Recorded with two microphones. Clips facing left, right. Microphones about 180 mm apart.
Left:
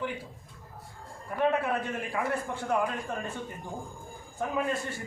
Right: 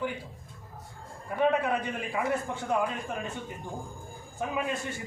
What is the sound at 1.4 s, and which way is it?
A man's voice, centre (ahead or behind).